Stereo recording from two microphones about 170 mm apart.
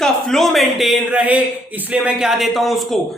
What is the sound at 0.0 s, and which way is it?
A man's voice, centre (ahead or behind).